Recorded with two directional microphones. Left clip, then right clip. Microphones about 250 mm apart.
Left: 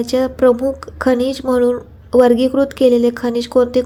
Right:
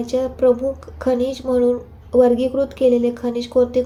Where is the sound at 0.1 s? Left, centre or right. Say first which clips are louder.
Left 3 dB; left.